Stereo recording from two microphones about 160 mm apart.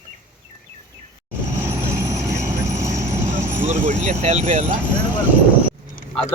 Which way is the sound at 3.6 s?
50° right (ahead or behind).